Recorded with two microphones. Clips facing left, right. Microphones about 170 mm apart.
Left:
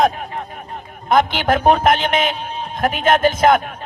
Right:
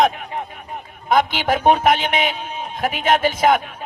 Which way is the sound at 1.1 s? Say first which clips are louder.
Left 2 dB; 50° left (ahead or behind).